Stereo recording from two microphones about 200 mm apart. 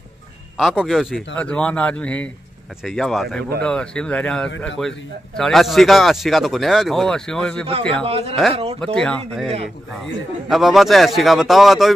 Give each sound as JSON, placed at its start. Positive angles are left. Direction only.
{"t": 0.6, "sound": "speech", "side_deg": 0}
{"t": 8.0, "sound": "speech", "side_deg": -30}
{"t": 8.9, "sound": "speech", "side_deg": 0}
{"t": 10.5, "sound": "speech", "side_deg": 0}